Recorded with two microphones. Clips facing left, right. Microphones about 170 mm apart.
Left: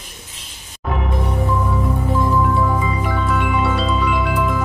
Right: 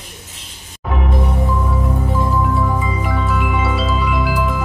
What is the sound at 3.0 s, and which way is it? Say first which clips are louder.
Music: even; centre (ahead or behind).